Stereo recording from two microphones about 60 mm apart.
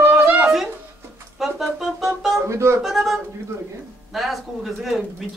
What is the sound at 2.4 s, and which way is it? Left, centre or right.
Speech, right.